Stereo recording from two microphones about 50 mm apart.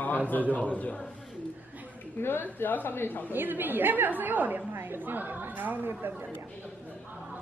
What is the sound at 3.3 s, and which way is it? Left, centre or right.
Speech, right.